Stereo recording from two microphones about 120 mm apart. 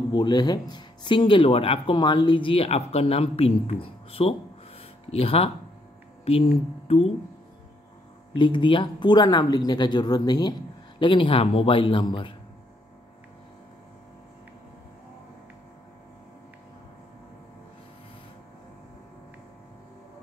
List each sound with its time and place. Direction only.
0.1 s speech: 35° left (ahead or behind); by 6.4 s 60° left (ahead or behind)
8.4 s speech: 45° left (ahead or behind)